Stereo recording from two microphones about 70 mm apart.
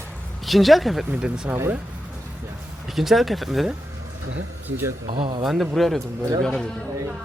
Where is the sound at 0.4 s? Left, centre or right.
Centre.